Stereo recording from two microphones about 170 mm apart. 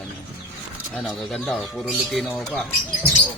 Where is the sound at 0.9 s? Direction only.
Centre (ahead or behind).